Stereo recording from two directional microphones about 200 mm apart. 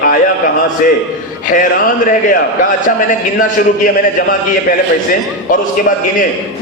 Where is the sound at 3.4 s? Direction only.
40° left (ahead or behind).